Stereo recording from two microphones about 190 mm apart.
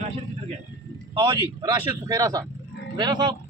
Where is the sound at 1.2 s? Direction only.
25° right (ahead or behind).